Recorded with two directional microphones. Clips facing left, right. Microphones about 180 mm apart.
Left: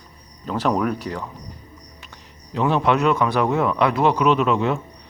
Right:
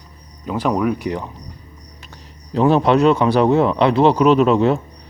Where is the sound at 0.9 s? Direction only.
15° right (ahead or behind).